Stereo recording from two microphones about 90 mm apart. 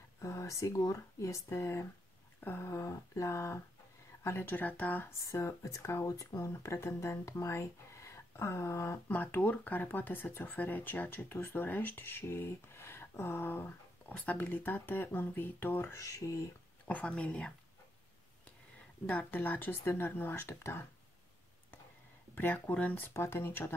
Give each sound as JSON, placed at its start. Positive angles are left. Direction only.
{"t": 0.2, "sound": "speech", "side_deg": 35}
{"t": 2.4, "sound": "a sound", "side_deg": 25}
{"t": 2.7, "sound": "speech", "side_deg": 35}
{"t": 5.2, "sound": "speech", "side_deg": 35}
{"t": 9.1, "sound": "speech", "side_deg": 20}
{"t": 16.0, "sound": "speech", "side_deg": 35}
{"t": 16.8, "sound": "speech", "side_deg": 15}
{"t": 19.0, "sound": "speech", "side_deg": 20}
{"t": 22.3, "sound": "speech", "side_deg": 20}